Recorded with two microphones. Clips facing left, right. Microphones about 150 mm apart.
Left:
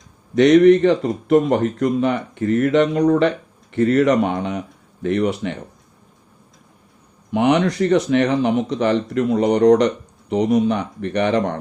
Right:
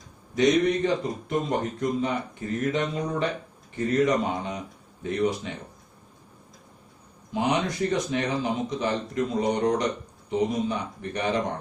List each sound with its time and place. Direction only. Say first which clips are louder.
0.3 s speech: left 10 dB; 70° left (ahead or behind)
7.3 s speech: left 9 dB; 70° left (ahead or behind)